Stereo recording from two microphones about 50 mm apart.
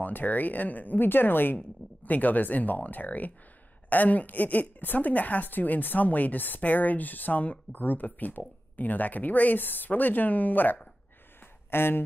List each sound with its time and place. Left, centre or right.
0.0 s a woman's voice: left
11.7 s speech: left